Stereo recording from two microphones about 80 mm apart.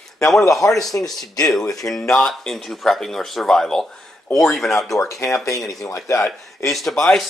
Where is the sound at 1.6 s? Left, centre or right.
Left.